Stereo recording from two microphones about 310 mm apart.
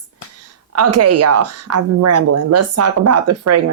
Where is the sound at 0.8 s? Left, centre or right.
Right.